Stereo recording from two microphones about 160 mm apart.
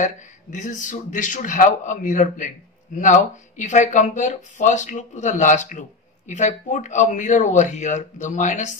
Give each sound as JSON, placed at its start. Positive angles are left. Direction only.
{"t": 0.0, "sound": "a man's voice", "side_deg": 50}